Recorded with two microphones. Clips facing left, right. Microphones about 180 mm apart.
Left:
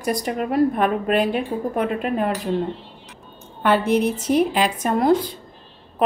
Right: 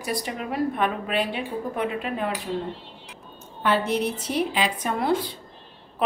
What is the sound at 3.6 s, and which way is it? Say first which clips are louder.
A woman's voice: left 5 dB; 55° left (ahead or behind).